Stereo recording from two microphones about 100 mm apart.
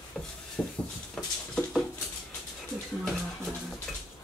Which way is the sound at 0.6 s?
Centre (ahead or behind).